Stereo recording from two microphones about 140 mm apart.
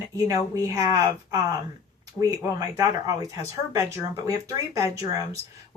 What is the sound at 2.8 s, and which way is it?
Speech, 25° right (ahead or behind).